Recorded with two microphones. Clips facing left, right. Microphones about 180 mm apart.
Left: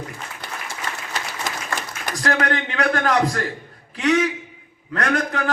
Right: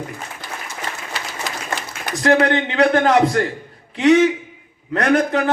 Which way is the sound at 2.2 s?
25° right (ahead or behind).